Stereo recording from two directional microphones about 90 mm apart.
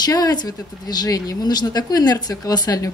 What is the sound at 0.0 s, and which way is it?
Speech, 45° left (ahead or behind).